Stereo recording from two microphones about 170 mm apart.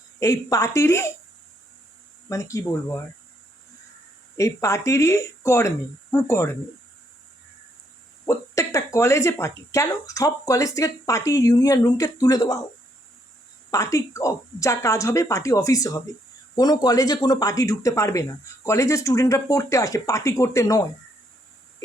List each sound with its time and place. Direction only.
0.2 s speech: 20° left (ahead or behind)
2.3 s speech: 20° left (ahead or behind)
4.4 s speech: 15° left (ahead or behind)
8.3 s speech: 20° left (ahead or behind)
13.7 s speech: 20° left (ahead or behind)